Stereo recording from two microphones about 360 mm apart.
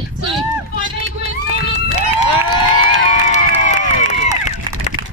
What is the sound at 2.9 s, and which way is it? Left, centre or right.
Run, centre.